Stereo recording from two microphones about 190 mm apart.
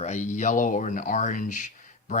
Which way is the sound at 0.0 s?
35° left (ahead or behind).